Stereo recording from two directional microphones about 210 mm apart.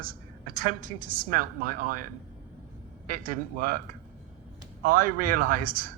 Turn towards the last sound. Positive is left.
turn(degrees=-40)  # may be behind; listen again after turning